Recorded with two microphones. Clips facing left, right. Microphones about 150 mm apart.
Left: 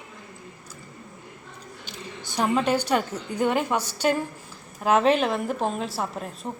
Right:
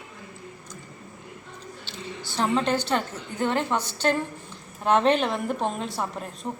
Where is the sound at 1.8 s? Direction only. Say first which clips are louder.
Right 1 dB; 15° left (ahead or behind).